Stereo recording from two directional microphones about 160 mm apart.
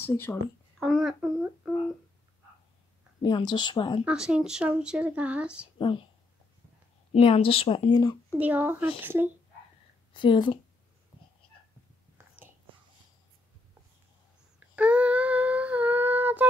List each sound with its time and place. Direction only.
0.0 s speech: 15° left (ahead or behind)
0.7 s a sound: centre (ahead or behind)
3.2 s a woman's voice: 30° left (ahead or behind)
4.0 s speech: 5° right (ahead or behind)
5.8 s speech: 30° left (ahead or behind)
7.1 s a woman's voice: 35° left (ahead or behind)
8.4 s speech: 10° right (ahead or behind)
10.1 s a woman's voice: 30° left (ahead or behind)
14.8 s a sound: 10° right (ahead or behind)